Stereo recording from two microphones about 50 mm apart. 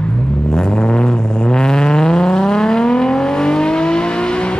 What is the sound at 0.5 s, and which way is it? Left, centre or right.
Vehicle, centre.